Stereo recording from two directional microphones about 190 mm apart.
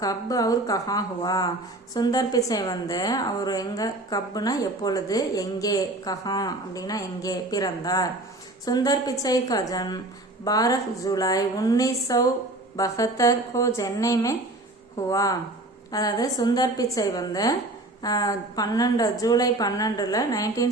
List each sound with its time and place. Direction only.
0.0 s a woman's voice: 20° left (ahead or behind)